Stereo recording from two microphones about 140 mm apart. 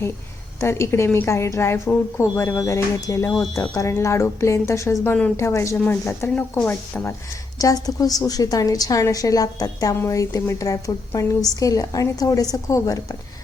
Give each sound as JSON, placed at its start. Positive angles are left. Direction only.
{"t": 0.6, "sound": "a woman's voice", "side_deg": 20}
{"t": 7.6, "sound": "a woman's voice", "side_deg": 25}